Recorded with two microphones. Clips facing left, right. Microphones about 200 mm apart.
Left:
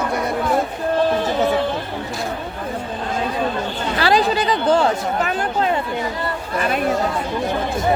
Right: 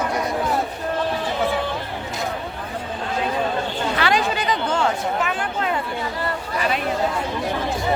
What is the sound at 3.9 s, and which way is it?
Speech, 35° left (ahead or behind).